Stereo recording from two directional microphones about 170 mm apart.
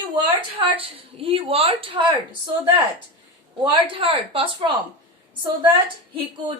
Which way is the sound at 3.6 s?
30° right (ahead or behind).